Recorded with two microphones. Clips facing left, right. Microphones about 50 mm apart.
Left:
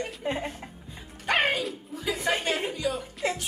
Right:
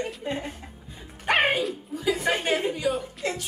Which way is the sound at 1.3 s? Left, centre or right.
Centre.